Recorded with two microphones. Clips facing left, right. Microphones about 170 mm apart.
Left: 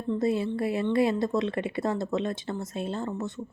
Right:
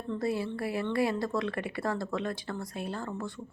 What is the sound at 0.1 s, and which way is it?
A woman's voice, 20° left (ahead or behind).